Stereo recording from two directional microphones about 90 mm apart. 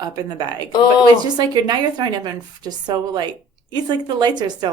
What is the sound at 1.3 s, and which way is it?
A woman's voice, 50° right (ahead or behind).